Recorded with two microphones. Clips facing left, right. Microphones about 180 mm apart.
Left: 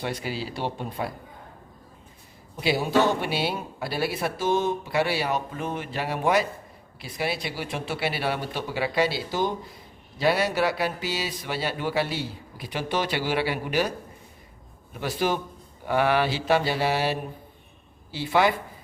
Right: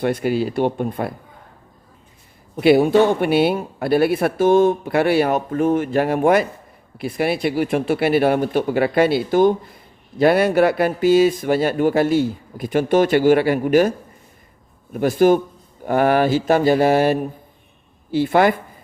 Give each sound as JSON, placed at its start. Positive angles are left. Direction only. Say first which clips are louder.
{"t": 0.0, "sound": "speech", "louder": "right 11 dB", "side_deg": -55}
{"t": 2.6, "sound": "speech", "louder": "right 10 dB", "side_deg": -60}
{"t": 14.9, "sound": "speech", "louder": "right 12 dB", "side_deg": -50}